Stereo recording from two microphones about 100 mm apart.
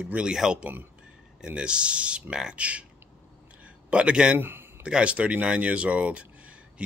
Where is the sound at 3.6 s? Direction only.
10° right (ahead or behind).